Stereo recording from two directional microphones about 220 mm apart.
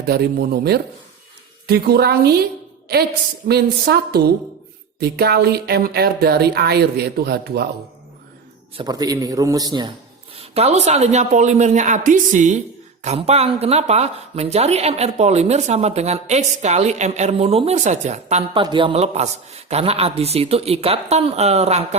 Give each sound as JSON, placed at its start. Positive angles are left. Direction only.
{"t": 0.0, "sound": "speech", "side_deg": -45}
{"t": 3.5, "sound": "speech", "side_deg": -45}
{"t": 8.7, "sound": "a man's voice", "side_deg": -20}